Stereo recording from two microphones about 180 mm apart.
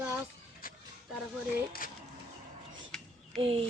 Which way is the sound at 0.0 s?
10° right (ahead or behind).